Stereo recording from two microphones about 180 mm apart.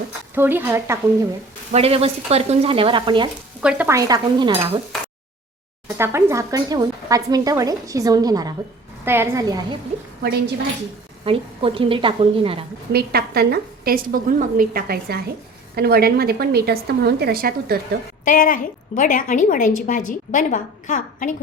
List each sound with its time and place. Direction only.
0.3 s speech: 10° right (ahead or behind)
1.7 s frying: 35° right (ahead or behind)
3.6 s speech: 5° right (ahead or behind); by 4.5 s 20° right (ahead or behind)
6.0 s a woman's voice: 15° right (ahead or behind)
11.3 s a woman's voice: 30° right (ahead or behind)
12.9 s a woman's voice: 60° right (ahead or behind)
18.3 s a woman's voice: 50° left (ahead or behind)